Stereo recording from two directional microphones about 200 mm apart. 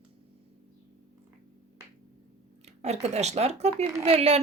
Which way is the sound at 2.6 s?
35° right (ahead or behind).